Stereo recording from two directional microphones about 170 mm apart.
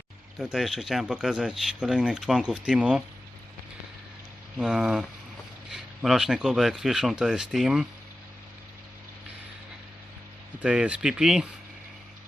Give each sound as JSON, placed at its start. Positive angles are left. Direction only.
{"t": 0.3, "sound": "speech", "side_deg": 0}
{"t": 4.5, "sound": "speech", "side_deg": -5}
{"t": 10.6, "sound": "speech", "side_deg": -5}